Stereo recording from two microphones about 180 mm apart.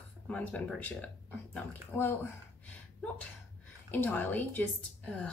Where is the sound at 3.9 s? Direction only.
10° left (ahead or behind).